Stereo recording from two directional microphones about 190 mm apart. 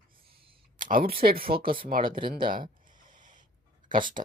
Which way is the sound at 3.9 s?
45° right (ahead or behind).